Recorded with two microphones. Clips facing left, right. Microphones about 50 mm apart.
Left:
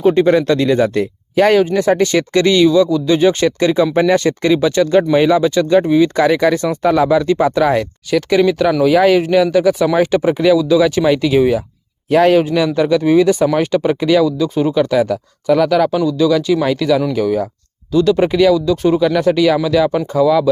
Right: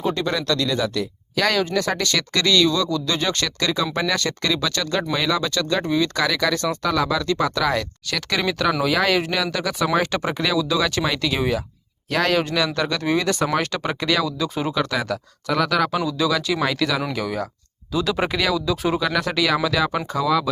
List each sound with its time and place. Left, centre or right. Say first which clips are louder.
0.0 s speech: left 12 dB; left
8.1 s speech: left 11 dB; centre